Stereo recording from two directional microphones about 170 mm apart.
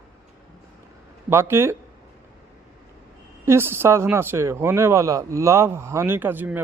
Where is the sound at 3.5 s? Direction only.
15° right (ahead or behind).